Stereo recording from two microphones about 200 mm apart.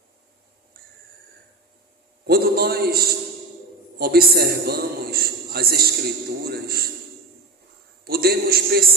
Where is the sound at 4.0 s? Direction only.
50° right (ahead or behind).